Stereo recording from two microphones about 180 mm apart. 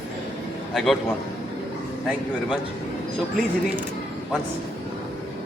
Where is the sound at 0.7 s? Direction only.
Centre (ahead or behind).